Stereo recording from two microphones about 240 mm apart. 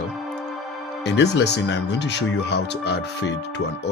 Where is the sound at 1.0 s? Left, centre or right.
Left.